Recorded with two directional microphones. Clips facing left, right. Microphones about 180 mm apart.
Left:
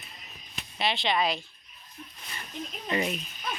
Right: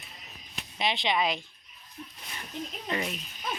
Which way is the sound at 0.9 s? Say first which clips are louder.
Left 1 dB; 20° right (ahead or behind).